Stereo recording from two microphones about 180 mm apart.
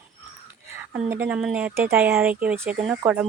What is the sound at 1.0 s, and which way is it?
Speech, 10° right (ahead or behind).